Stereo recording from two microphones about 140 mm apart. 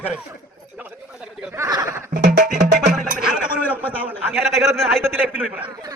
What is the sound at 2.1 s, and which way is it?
Music, 80° right.